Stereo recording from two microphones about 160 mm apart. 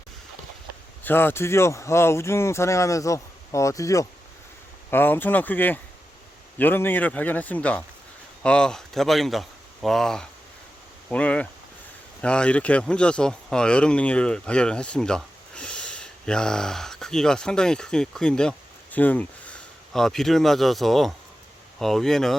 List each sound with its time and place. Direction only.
1.0 s speech: 15° left (ahead or behind)